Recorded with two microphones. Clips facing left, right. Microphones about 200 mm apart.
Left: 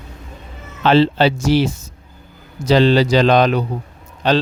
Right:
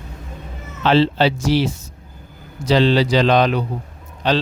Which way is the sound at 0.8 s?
50° left (ahead or behind).